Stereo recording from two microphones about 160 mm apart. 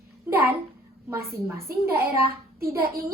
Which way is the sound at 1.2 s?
75° right (ahead or behind).